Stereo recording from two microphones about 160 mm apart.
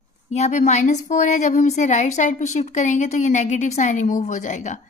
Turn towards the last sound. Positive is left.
turn(degrees=50)  # may be behind; listen again after turning